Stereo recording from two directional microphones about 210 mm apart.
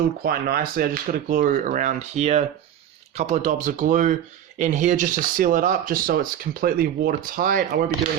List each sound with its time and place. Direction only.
0.2 s speech: 45° right (ahead or behind)